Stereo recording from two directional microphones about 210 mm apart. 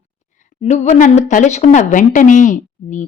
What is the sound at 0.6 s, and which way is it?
Speech, 30° left (ahead or behind).